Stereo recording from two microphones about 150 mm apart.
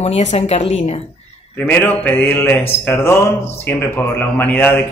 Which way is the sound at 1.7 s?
10° left (ahead or behind).